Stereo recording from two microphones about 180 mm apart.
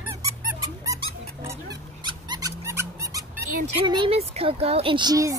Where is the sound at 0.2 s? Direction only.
20° right (ahead or behind).